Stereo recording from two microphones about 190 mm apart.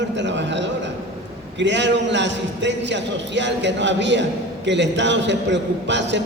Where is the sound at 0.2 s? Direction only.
70° right (ahead or behind).